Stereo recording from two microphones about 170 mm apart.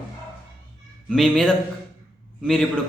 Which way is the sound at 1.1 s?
Centre (ahead or behind).